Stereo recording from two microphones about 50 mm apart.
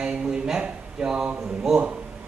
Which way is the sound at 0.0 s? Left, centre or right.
Centre.